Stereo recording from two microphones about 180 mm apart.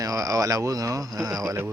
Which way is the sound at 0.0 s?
20° right (ahead or behind).